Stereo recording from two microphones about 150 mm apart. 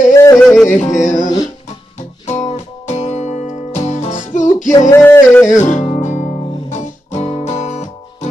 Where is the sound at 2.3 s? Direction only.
50° left (ahead or behind).